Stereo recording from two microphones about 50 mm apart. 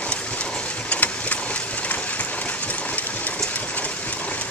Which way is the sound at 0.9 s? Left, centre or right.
Left.